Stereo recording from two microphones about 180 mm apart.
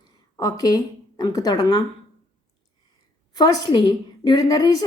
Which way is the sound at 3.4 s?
25° left (ahead or behind).